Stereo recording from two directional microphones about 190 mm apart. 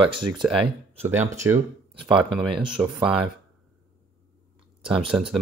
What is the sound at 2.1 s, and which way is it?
Speech, centre (ahead or behind).